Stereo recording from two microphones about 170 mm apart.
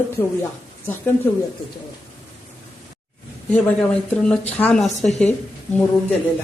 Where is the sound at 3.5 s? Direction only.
10° left (ahead or behind).